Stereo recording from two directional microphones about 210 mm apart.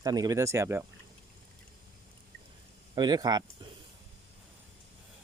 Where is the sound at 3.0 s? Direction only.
20° right (ahead or behind).